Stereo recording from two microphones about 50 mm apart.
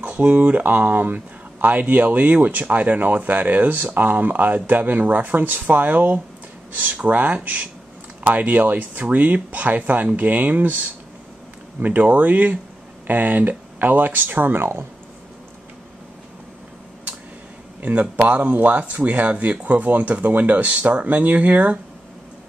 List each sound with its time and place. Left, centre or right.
0.0 s speech: right
17.8 s speech: right